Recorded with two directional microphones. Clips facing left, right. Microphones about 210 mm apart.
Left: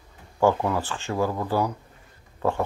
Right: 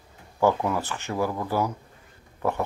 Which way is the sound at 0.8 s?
20° right (ahead or behind).